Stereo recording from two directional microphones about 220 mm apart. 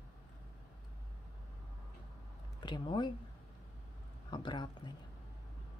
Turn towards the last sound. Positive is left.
turn(degrees=20)  # may be behind; listen again after turning